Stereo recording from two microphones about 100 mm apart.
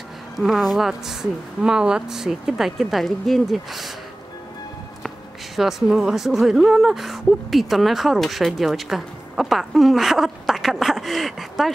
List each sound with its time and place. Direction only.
0.4 s speech: centre (ahead or behind)
5.6 s speech: 5° right (ahead or behind)